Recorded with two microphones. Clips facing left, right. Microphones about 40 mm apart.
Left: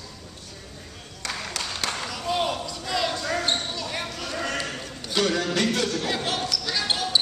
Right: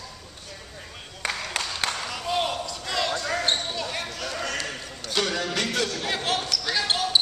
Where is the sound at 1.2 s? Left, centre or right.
Right.